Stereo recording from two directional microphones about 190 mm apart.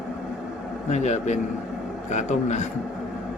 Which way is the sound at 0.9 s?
35° left (ahead or behind).